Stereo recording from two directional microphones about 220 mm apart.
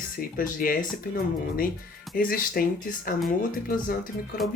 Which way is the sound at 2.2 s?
40° left (ahead or behind).